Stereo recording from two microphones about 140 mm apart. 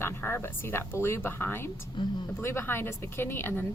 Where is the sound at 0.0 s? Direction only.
15° left (ahead or behind).